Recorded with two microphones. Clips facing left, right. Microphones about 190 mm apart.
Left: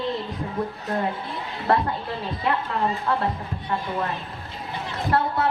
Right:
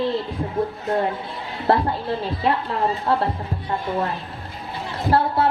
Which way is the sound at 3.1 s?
30° right (ahead or behind).